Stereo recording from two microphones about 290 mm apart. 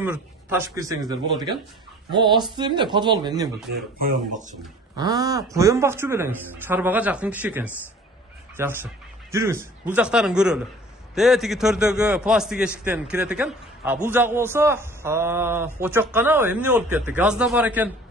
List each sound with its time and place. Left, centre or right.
0.0 s a man's voice: centre
4.9 s a man's voice: centre